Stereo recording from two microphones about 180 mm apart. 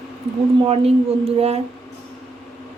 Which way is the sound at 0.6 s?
35° right (ahead or behind).